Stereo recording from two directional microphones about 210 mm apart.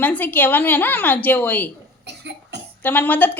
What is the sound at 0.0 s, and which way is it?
A woman's voice, 10° left (ahead or behind).